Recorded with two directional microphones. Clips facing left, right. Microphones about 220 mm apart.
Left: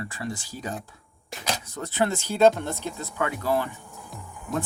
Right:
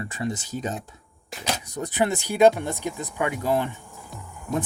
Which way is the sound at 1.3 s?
Centre (ahead or behind).